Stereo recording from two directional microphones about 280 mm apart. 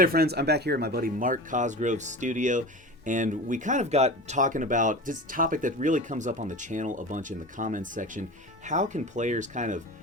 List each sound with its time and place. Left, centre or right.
0.0 s speech: right